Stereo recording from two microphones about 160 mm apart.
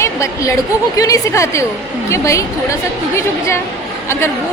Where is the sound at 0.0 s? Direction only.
20° left (ahead or behind).